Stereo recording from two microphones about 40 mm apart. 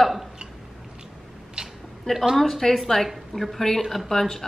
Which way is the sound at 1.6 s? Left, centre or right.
Centre.